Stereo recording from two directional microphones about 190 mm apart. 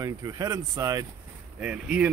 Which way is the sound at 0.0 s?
20° right (ahead or behind).